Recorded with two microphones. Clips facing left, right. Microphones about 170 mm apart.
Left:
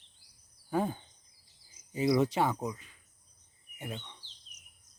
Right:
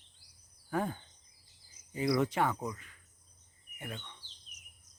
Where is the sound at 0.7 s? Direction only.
20° left (ahead or behind).